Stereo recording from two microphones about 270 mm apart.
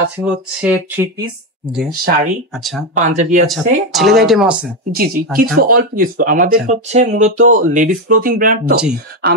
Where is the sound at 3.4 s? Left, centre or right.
Centre.